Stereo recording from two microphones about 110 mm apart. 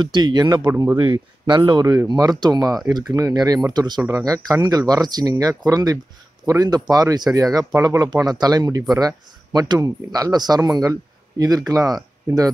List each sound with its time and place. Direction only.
0.0 s speech: 45° right (ahead or behind)
0.7 s speech: 25° right (ahead or behind)
0.9 s speech: 40° right (ahead or behind)